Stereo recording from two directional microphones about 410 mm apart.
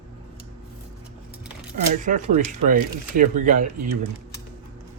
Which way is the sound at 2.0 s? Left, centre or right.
Centre.